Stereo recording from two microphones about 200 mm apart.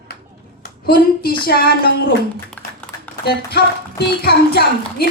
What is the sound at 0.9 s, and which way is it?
Speech, 50° left (ahead or behind).